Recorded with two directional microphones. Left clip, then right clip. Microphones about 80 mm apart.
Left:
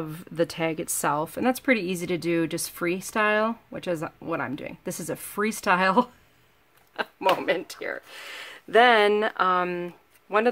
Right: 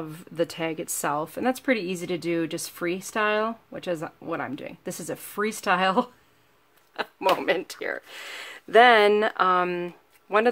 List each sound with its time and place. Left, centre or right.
0.0 s speech: left
7.3 s speech: right
7.6 s speech: right
8.2 s speech: centre